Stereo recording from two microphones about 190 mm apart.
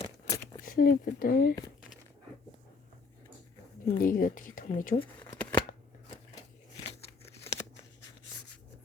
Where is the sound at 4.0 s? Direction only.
45° left (ahead or behind).